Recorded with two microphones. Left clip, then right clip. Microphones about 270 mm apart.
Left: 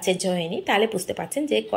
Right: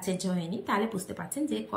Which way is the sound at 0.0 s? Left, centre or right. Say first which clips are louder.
Left 10 dB; centre.